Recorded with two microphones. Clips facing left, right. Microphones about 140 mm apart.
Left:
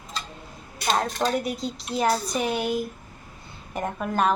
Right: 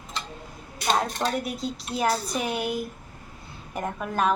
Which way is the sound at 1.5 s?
5° right (ahead or behind).